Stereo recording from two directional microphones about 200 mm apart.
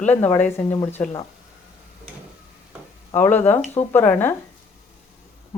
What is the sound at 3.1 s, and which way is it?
Speech, 10° left (ahead or behind).